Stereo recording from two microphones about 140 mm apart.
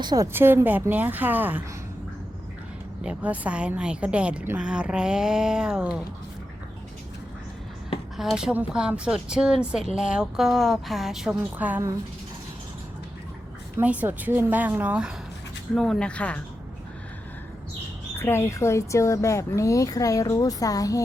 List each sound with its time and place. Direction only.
0.0 s speech: 30° right (ahead or behind)
0.3 s a woman's voice: 15° right (ahead or behind)
3.0 s a woman's voice: 10° right (ahead or behind)
8.1 s speech: centre (ahead or behind)
13.7 s a woman's voice: 10° right (ahead or behind)
15.7 s speech: 5° left (ahead or behind)
18.2 s a woman's voice: 20° left (ahead or behind)